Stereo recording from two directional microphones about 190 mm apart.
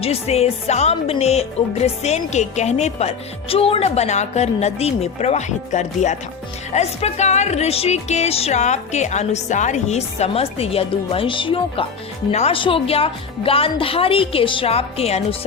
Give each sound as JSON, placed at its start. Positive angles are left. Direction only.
{"t": 0.0, "sound": "a woman's voice", "side_deg": 30}